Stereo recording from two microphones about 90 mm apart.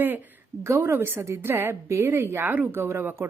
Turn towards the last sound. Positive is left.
turn(degrees=-30)  # may be behind; listen again after turning